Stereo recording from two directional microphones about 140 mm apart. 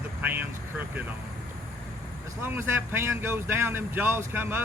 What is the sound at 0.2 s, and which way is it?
Vehicle, 15° right (ahead or behind).